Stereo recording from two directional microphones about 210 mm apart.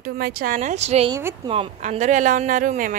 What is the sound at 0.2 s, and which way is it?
A woman's voice, 45° right (ahead or behind).